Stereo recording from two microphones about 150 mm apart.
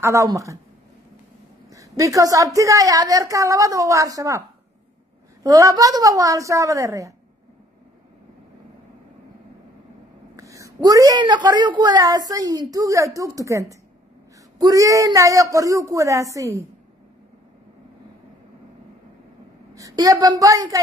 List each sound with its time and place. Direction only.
0.0 s a woman's voice: 20° right (ahead or behind)
1.7 s a woman's voice: 20° right (ahead or behind)
10.3 s a woman's voice: 20° right (ahead or behind)
19.7 s a woman's voice: 25° right (ahead or behind)